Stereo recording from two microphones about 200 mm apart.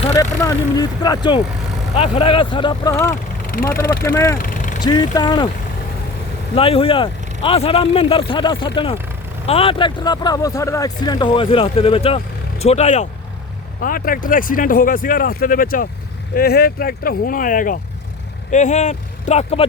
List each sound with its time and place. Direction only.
0.2 s speech: 15° left (ahead or behind)
4.4 s vehicle: 40° left (ahead or behind)
4.8 s speech: 20° left (ahead or behind)
6.6 s speech: 30° left (ahead or behind)
13.8 s speech: 45° left (ahead or behind)